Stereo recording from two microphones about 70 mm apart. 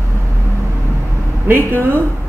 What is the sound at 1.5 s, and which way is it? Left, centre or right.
Speech, right.